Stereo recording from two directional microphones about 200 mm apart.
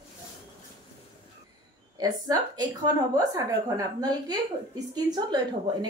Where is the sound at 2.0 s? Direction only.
20° right (ahead or behind).